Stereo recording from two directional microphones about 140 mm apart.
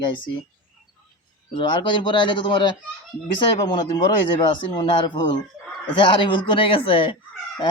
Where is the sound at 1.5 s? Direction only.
35° left (ahead or behind).